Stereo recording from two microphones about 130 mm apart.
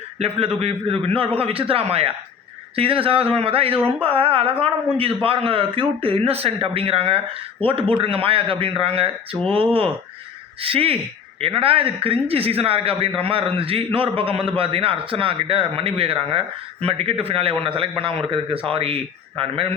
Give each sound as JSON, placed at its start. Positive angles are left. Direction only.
{"t": 0.2, "sound": "a man's voice", "side_deg": -50}
{"t": 10.6, "sound": "a man's voice", "side_deg": -45}